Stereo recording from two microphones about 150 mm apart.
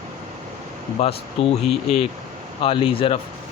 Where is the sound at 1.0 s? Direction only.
40° left (ahead or behind).